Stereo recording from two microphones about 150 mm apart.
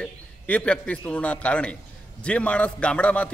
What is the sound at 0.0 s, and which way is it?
A man's voice, 5° left (ahead or behind).